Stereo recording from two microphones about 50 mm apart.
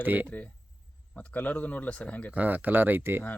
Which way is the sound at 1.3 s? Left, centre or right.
Left.